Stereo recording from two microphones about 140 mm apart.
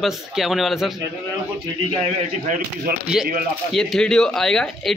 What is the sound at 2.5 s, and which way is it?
Speech, 75° right (ahead or behind).